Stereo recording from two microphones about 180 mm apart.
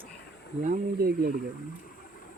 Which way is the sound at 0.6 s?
55° right (ahead or behind).